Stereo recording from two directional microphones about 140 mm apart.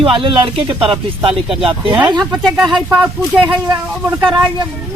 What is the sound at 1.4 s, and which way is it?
Speech, 5° right (ahead or behind).